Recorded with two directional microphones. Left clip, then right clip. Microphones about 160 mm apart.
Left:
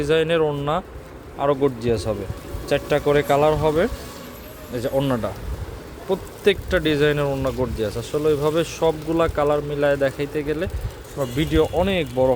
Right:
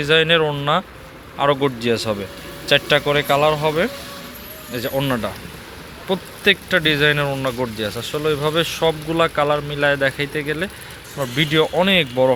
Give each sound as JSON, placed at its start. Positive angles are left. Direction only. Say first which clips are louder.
{"t": 0.0, "sound": "a man's voice", "louder": "right 3 dB", "side_deg": 5}
{"t": 3.1, "sound": "a man's voice", "louder": "left 2 dB", "side_deg": 20}